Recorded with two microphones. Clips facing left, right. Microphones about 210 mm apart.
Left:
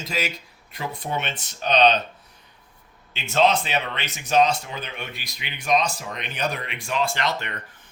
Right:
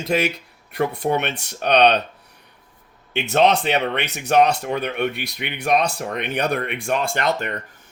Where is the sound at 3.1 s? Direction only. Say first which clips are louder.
Right 3 dB; 65° right (ahead or behind).